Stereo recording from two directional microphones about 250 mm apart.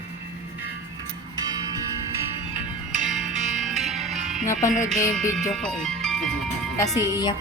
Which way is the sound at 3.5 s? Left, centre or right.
Centre.